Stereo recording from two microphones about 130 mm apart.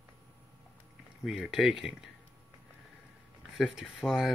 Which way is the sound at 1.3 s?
5° right (ahead or behind).